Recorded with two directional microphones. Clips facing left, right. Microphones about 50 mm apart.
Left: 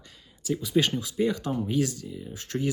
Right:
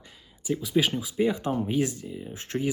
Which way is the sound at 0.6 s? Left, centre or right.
Centre.